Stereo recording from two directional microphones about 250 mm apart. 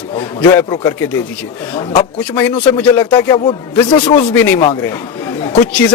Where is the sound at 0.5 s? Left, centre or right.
Centre.